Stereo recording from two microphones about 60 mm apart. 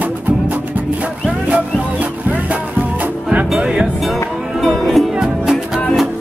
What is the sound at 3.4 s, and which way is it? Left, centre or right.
Music, centre.